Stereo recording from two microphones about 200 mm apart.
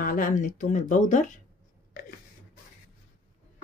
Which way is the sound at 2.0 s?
45° left (ahead or behind).